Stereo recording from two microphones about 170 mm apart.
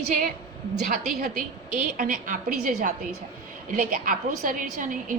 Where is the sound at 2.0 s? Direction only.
50° right (ahead or behind).